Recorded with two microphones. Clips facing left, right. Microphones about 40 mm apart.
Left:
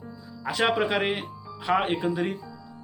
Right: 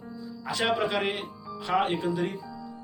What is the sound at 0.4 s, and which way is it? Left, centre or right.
Speech, centre.